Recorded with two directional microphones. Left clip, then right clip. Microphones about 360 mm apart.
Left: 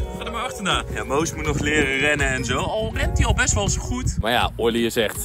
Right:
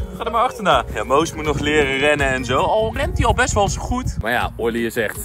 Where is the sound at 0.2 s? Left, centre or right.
Centre.